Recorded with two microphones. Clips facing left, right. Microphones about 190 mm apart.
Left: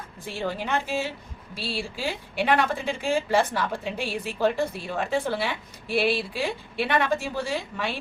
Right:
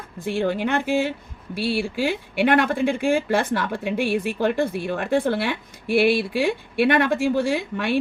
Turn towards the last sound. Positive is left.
turn(degrees=-60)  # may be behind; listen again after turning